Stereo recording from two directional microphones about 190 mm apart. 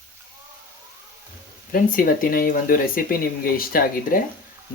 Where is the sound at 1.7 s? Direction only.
45° left (ahead or behind).